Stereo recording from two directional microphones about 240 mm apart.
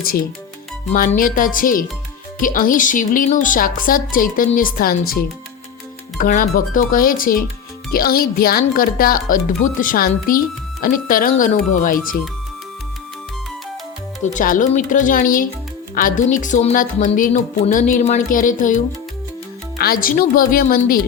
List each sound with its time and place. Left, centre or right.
0.9 s speech: left
6.1 s speech: left
14.3 s speech: left
19.8 s speech: left